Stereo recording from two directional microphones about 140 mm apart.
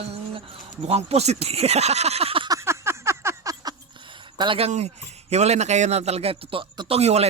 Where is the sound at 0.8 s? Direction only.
45° right (ahead or behind).